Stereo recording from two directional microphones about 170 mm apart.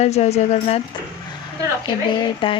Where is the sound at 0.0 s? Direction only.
40° left (ahead or behind).